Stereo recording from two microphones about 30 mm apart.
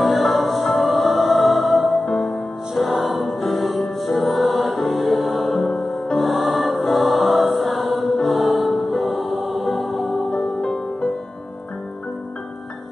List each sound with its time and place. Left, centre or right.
0.0 s music: centre
5.6 s music: centre
6.1 s music: centre